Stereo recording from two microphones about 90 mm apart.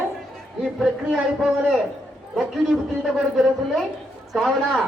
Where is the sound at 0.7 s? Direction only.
Centre (ahead or behind).